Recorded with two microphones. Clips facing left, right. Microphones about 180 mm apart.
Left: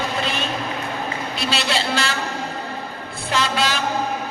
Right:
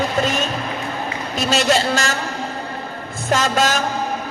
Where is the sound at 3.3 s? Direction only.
45° right (ahead or behind).